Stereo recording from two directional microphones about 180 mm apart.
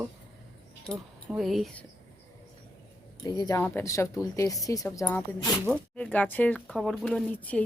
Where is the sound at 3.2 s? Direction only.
20° left (ahead or behind).